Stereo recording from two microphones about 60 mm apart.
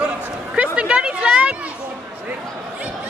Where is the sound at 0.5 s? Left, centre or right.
Right.